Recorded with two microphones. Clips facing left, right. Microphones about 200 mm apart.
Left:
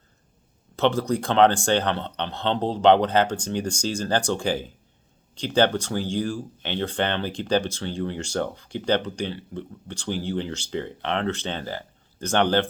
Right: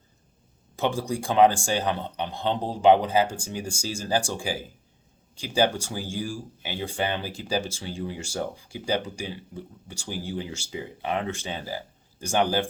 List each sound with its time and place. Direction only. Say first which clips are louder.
0.8 s speech: left 5 dB; 10° right (ahead or behind)